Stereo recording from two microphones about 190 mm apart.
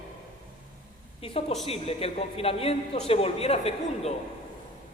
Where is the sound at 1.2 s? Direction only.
30° left (ahead or behind).